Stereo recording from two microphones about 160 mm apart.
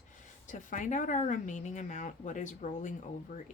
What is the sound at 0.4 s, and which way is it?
Speech, 50° left (ahead or behind).